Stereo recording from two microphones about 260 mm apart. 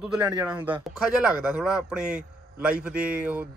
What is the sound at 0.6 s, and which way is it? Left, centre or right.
Speech, centre.